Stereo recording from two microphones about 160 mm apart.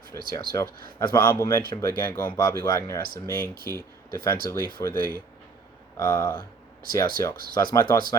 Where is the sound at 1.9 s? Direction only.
70° right (ahead or behind).